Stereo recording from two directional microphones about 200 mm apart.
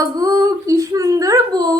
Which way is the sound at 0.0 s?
15° right (ahead or behind).